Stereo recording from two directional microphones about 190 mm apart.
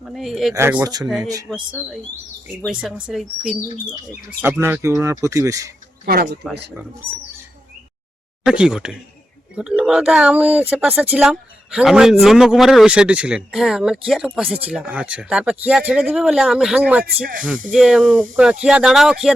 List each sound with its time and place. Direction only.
0.0 s speech: centre (ahead or behind); by 5.7 s 15° right (ahead or behind)
6.1 s speech: 50° right (ahead or behind)
8.4 s speech: 5° right (ahead or behind)